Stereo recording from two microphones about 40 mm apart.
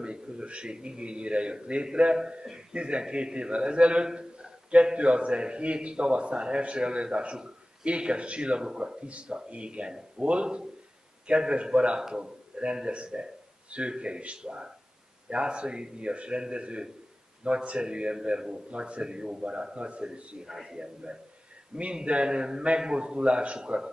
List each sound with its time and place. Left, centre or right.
0.0 s a man's voice: right
20.4 s a man's voice: centre
20.8 s a man's voice: right